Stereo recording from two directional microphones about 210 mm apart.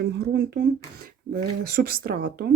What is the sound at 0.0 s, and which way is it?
A woman's voice, 50° right (ahead or behind).